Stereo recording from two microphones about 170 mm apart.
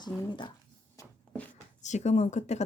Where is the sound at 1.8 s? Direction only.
45° left (ahead or behind).